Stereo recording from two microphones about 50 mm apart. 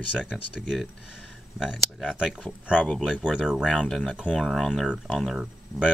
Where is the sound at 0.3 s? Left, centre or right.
Centre.